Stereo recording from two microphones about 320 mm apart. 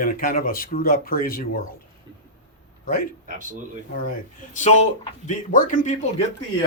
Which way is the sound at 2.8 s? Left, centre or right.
Left.